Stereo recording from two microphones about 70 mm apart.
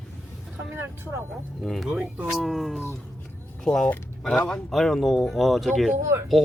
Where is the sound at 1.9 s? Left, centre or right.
Centre.